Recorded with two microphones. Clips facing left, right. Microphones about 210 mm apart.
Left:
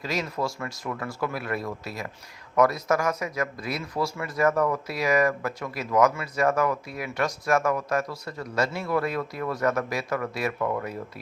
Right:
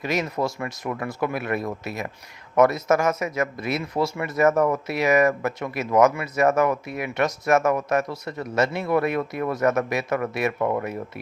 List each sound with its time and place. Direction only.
0.0 s speech: 20° right (ahead or behind)